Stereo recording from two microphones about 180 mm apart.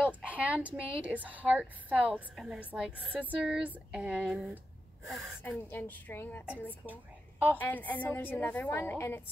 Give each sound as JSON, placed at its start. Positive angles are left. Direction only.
{"t": 0.3, "sound": "a woman's voice", "side_deg": -10}
{"t": 5.4, "sound": "a woman's voice", "side_deg": 10}
{"t": 6.9, "sound": "a woman's voice", "side_deg": -10}
{"t": 7.5, "sound": "a woman's voice", "side_deg": 10}